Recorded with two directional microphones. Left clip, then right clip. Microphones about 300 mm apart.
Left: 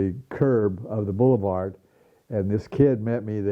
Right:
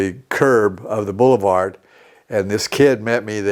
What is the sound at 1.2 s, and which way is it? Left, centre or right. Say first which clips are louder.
Speech: right 7 dB; right.